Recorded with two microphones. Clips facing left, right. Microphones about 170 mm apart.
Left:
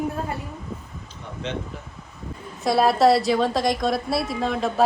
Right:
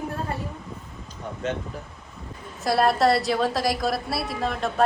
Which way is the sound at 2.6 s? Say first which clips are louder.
Left 3 dB; centre (ahead or behind).